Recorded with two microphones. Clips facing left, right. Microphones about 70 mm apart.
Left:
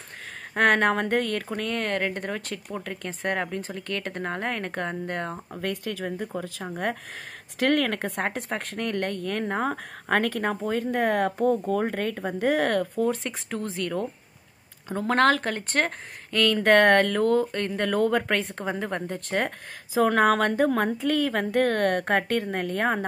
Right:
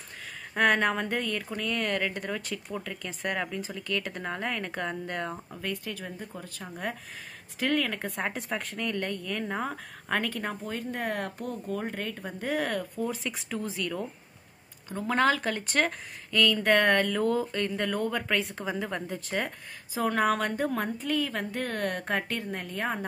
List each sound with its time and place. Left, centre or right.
0.6 s speech: left
5.6 s speech: left
7.5 s speech: left
11.4 s speech: centre
11.7 s speech: left
15.0 s speech: left
15.4 s speech: left
17.9 s speech: left
18.3 s speech: left
19.9 s a woman's voice: left